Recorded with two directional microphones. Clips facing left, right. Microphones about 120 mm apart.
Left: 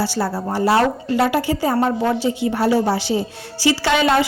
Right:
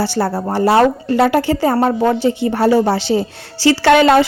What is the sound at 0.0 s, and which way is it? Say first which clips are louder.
A woman's voice: right 4 dB; 60° right (ahead or behind).